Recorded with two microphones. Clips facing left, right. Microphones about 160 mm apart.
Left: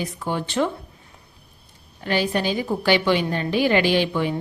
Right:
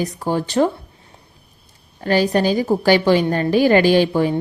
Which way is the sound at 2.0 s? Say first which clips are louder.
Right 6 dB; 40° right (ahead or behind).